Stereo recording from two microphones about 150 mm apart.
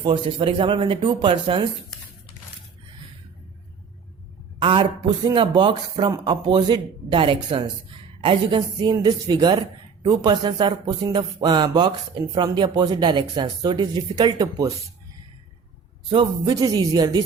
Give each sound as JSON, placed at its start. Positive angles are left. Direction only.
{"t": 0.0, "sound": "speech", "side_deg": -35}
{"t": 4.6, "sound": "speech", "side_deg": -35}
{"t": 16.0, "sound": "speech", "side_deg": -30}